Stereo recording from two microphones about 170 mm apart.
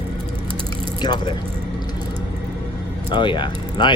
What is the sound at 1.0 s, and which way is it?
Speech, 25° left (ahead or behind).